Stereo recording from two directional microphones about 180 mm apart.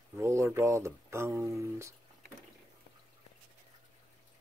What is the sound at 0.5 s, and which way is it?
Speech, 15° right (ahead or behind).